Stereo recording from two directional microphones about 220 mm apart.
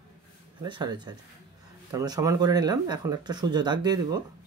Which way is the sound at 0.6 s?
20° right (ahead or behind).